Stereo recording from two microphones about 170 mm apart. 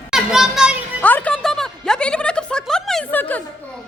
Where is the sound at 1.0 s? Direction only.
10° left (ahead or behind).